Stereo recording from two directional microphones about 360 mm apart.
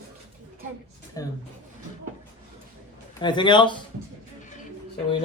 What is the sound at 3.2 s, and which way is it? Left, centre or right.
Speech, centre.